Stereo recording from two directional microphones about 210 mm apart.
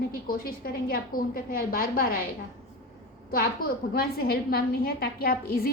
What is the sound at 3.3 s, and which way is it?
A woman's voice, 45° left (ahead or behind).